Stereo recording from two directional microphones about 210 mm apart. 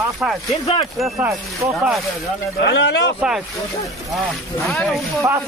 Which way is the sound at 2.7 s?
55° left (ahead or behind).